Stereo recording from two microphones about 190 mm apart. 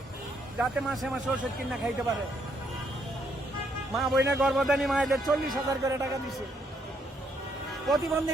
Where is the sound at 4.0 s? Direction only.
Centre (ahead or behind).